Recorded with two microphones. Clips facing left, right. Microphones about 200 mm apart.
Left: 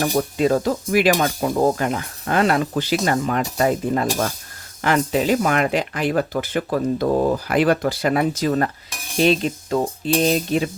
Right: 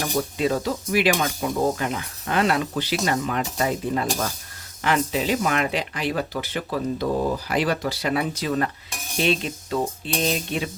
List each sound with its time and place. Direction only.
0.0 s speech: 45° left (ahead or behind)
9.2 s cutlery: 40° left (ahead or behind)